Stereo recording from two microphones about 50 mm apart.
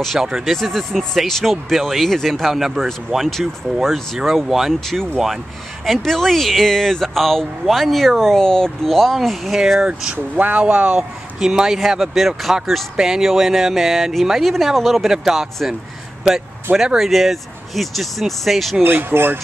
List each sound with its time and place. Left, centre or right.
0.2 s speech: centre
0.6 s speech: centre
4.3 s speech: centre
4.7 s speech: centre
9.8 s speech: centre
10.3 s speech: right
11.3 s speech: centre
16.7 s speech: centre
18.8 s speech: right